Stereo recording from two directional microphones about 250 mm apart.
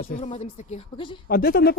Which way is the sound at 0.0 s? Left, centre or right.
Left.